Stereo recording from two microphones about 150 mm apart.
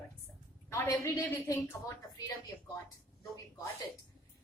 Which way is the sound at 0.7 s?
20° left (ahead or behind).